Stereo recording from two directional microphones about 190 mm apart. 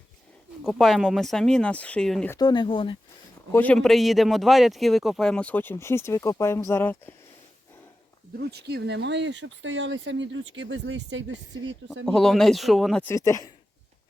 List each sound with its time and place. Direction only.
0.6 s speech: centre (ahead or behind)
2.3 s speech: 20° left (ahead or behind)
3.5 s speech: 10° left (ahead or behind)
8.4 s speech: 60° right (ahead or behind)
12.0 s speech: centre (ahead or behind)
13.1 s speech: 15° left (ahead or behind)